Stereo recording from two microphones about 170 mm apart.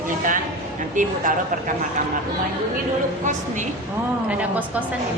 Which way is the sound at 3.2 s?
45° right (ahead or behind).